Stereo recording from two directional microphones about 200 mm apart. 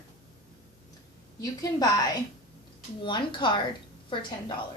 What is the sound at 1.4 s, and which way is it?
A woman's voice, 20° left (ahead or behind).